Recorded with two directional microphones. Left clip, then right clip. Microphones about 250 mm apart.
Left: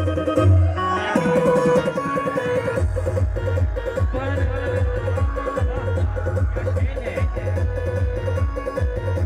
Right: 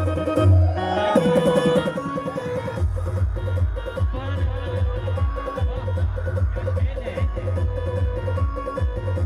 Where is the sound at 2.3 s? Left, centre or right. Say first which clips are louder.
Left 6 dB; left.